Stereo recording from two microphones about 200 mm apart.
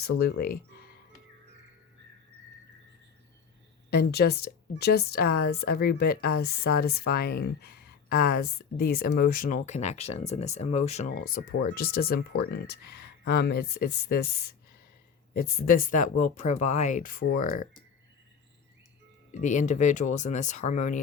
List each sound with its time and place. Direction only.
0.0 s speech: 55° left (ahead or behind)
3.8 s a woman's voice: 50° left (ahead or behind)
19.3 s speech: 40° left (ahead or behind)